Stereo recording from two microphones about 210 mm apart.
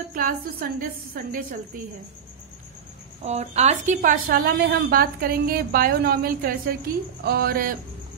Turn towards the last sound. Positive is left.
turn(degrees=-45)  # may be behind; listen again after turning